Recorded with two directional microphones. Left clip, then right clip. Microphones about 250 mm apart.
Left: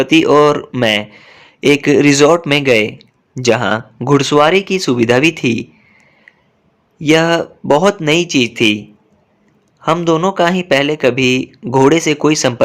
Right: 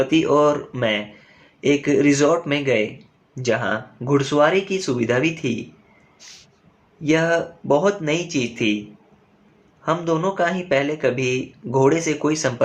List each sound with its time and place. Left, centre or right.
0.0 s speech: left
7.0 s speech: left
9.8 s speech: left